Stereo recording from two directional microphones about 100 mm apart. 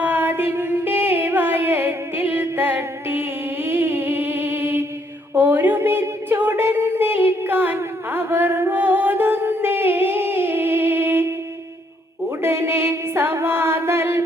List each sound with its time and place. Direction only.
0.0 s music: 20° right (ahead or behind)
5.3 s a sound: 20° right (ahead or behind)
12.4 s music: 25° right (ahead or behind)